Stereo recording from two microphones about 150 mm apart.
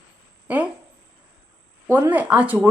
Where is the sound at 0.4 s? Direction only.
10° right (ahead or behind).